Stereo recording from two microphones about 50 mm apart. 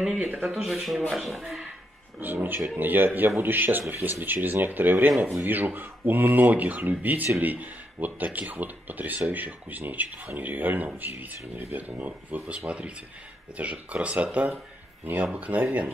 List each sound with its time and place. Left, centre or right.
0.0 s speech: centre
2.1 s speech: right